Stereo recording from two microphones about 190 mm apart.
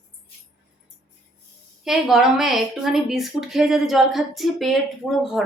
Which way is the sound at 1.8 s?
Centre (ahead or behind).